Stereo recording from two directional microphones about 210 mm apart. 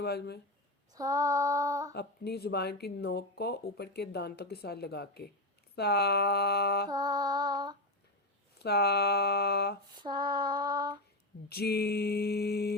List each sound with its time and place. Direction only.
0.0 s speech: 50° left (ahead or behind)
0.9 s female singing: 15° right (ahead or behind)
1.9 s speech: 50° left (ahead or behind)
6.9 s female singing: 20° right (ahead or behind)
8.5 s speech: 50° left (ahead or behind)
10.0 s female singing: 20° right (ahead or behind)
11.4 s speech: 50° left (ahead or behind)